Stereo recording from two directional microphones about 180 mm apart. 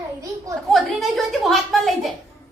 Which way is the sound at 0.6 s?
Centre (ahead or behind).